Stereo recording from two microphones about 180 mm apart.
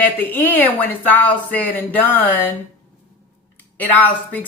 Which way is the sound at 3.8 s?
10° left (ahead or behind).